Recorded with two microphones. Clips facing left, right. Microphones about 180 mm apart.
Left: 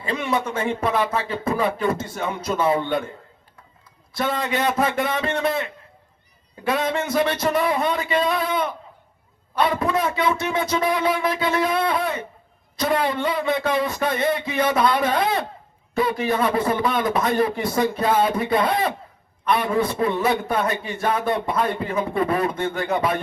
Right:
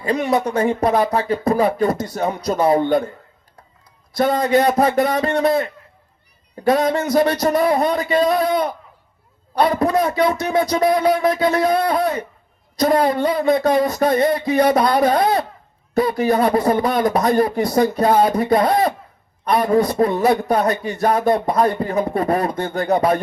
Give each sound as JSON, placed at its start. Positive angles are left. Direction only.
{"t": 0.0, "sound": "a man's voice", "side_deg": -40}
{"t": 4.1, "sound": "a man's voice", "side_deg": -40}